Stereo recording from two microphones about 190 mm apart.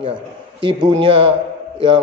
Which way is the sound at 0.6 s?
25° right (ahead or behind).